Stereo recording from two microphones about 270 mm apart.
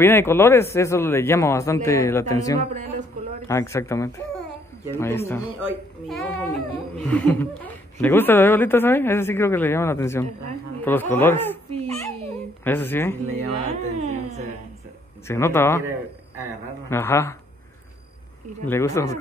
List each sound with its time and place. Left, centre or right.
0.0 s a woman's voice: centre
11.7 s babbling: right
12.6 s a woman's voice: centre
13.2 s speech: right
15.2 s a woman's voice: centre
16.9 s a woman's voice: centre
18.7 s a woman's voice: centre